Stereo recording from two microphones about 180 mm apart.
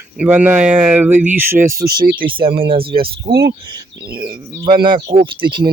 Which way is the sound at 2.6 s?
30° right (ahead or behind).